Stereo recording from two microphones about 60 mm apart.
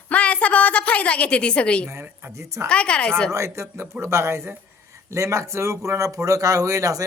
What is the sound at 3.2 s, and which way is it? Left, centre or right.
A man's voice, right.